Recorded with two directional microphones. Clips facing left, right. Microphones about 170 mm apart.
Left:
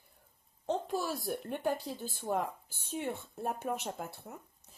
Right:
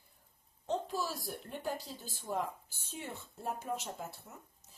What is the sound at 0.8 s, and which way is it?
A woman's voice, 55° left (ahead or behind).